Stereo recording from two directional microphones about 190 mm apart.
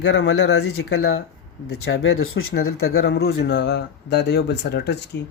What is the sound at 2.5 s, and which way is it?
Speech, 55° left (ahead or behind).